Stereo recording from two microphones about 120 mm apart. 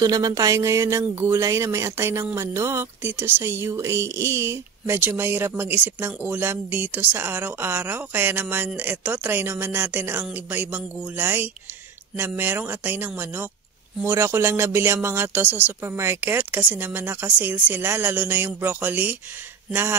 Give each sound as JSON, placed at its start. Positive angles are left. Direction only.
{"t": 0.0, "sound": "speech", "side_deg": -30}